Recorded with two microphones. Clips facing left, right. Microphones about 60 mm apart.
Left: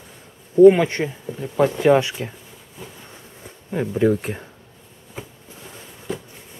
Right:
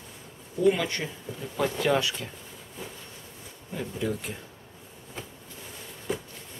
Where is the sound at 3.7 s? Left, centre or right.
Left.